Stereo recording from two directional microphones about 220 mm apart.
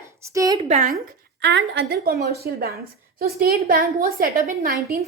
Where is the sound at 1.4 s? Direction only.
55° right (ahead or behind).